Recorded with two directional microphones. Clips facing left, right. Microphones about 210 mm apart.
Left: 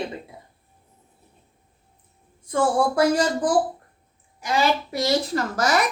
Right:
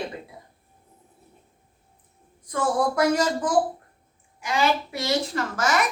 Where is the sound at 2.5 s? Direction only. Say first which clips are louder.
Left 3 dB; 30° left (ahead or behind).